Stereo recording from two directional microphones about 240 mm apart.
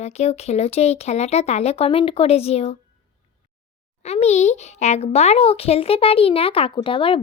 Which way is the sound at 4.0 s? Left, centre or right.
Left.